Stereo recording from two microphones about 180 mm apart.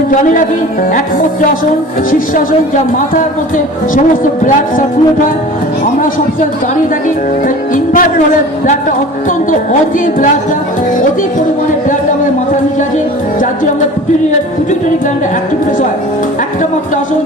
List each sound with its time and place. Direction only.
0.1 s a woman's voice: 45° left (ahead or behind)
2.0 s a woman's voice: 50° left (ahead or behind)
3.9 s a woman's voice: 45° left (ahead or behind)
7.4 s a woman's voice: 50° left (ahead or behind)